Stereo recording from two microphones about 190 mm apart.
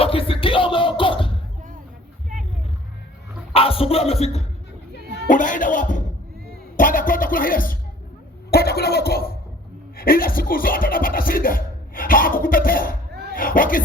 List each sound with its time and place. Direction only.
0.0 s music: 30° left (ahead or behind)
3.5 s music: 30° left (ahead or behind)
5.3 s speech: 45° left (ahead or behind)
8.4 s a sound: 55° left (ahead or behind)
10.0 s speech: 50° left (ahead or behind)